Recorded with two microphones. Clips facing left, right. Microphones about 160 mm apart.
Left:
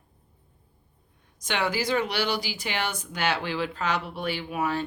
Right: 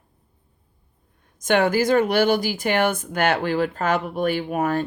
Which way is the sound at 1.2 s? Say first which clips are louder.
Right 9 dB; 50° right (ahead or behind).